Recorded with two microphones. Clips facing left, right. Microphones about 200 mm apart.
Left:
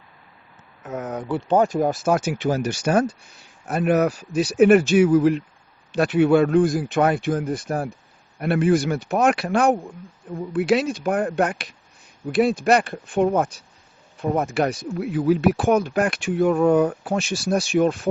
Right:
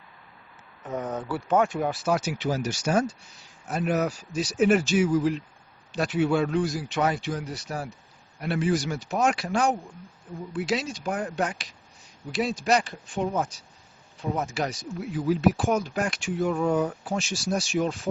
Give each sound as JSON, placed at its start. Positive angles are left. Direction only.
{"t": 0.9, "sound": "speech", "side_deg": 5}
{"t": 1.3, "sound": "speech", "side_deg": 25}